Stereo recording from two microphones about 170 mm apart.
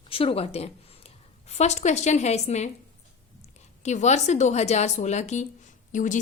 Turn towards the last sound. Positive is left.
turn(degrees=50)  # may be behind; listen again after turning